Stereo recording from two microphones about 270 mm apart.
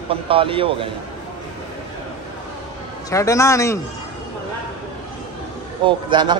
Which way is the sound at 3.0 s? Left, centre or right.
Centre.